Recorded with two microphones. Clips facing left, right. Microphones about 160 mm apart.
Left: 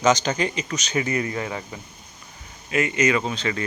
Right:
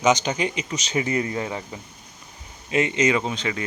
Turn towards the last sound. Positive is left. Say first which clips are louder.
# even
turn(degrees=-15)  # may be behind; listen again after turning